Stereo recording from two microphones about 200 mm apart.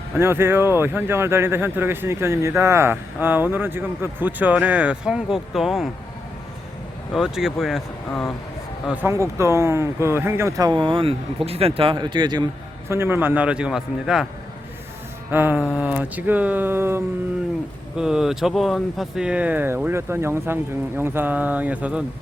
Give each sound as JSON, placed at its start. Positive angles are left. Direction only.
{"t": 0.2, "sound": "speech", "side_deg": -10}
{"t": 7.1, "sound": "speech", "side_deg": 0}
{"t": 8.9, "sound": "speech", "side_deg": -10}
{"t": 12.9, "sound": "speech", "side_deg": -10}
{"t": 15.3, "sound": "speech", "side_deg": -10}